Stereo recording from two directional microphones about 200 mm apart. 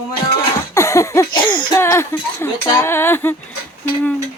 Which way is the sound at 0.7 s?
15° left (ahead or behind).